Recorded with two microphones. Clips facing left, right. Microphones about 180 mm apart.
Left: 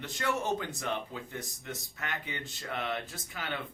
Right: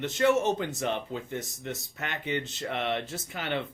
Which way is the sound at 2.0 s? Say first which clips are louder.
Right 8 dB; 20° right (ahead or behind).